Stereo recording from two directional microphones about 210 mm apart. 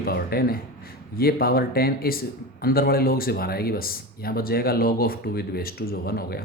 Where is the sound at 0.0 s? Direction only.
45° left (ahead or behind).